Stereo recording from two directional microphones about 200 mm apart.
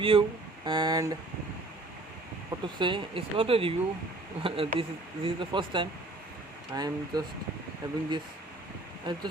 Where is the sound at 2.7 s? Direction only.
25° right (ahead or behind).